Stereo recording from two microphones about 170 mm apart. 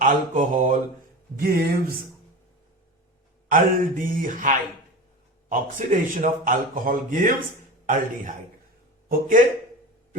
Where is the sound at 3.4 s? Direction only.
55° right (ahead or behind).